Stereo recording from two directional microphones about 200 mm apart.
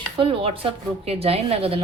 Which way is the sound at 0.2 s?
25° right (ahead or behind).